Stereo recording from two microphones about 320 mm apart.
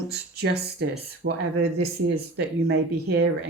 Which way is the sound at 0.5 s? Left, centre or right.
Right.